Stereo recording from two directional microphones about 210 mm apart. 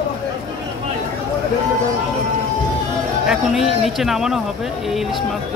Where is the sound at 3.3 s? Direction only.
Centre (ahead or behind).